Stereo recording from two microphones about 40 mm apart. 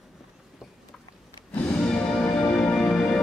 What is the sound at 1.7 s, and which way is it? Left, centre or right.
Music, left.